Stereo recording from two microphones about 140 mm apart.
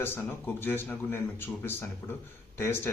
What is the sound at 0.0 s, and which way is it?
Speech, 15° left (ahead or behind).